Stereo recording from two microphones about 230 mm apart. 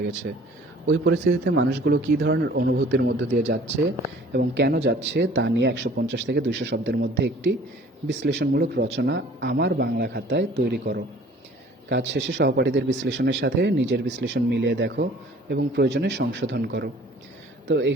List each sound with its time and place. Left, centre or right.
0.9 s speech: right
4.3 s speech: right